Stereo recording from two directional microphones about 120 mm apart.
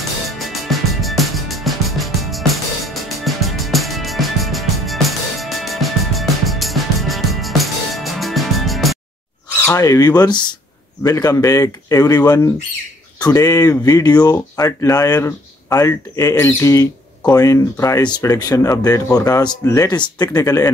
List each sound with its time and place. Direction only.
0.4 s music: centre (ahead or behind)
9.6 s speech: 25° left (ahead or behind)